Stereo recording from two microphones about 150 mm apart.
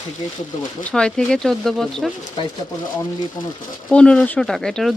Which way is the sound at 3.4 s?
20° left (ahead or behind).